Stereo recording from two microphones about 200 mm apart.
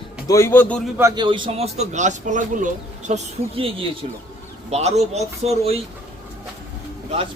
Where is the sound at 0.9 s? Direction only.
20° right (ahead or behind).